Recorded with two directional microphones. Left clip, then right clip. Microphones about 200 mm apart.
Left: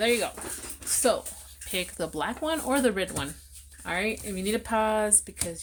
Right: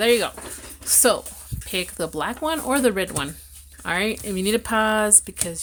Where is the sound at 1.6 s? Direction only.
25° right (ahead or behind).